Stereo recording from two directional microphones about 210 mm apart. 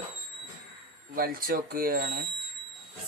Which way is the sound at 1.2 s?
45° right (ahead or behind).